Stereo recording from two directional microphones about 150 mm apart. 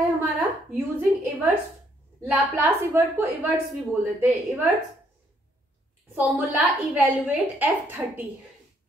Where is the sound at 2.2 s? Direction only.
15° right (ahead or behind).